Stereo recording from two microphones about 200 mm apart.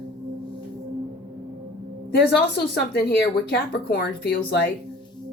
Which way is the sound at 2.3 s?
55° left (ahead or behind).